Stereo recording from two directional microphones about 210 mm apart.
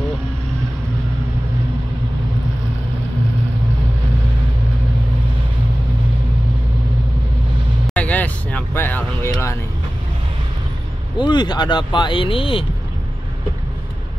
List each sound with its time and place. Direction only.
7.8 s vehicle: 5° left (ahead or behind)
11.1 s speech: 20° left (ahead or behind)